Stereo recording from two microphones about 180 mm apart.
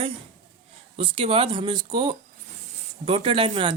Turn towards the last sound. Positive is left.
turn(degrees=-30)  # may be behind; listen again after turning